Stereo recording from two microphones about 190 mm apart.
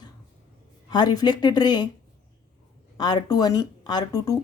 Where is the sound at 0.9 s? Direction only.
20° left (ahead or behind).